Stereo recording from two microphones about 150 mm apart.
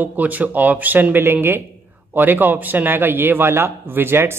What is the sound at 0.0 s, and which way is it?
A man's voice, 10° right (ahead or behind).